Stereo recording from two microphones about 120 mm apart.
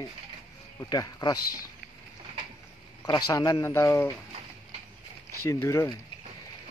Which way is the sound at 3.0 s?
30° left (ahead or behind).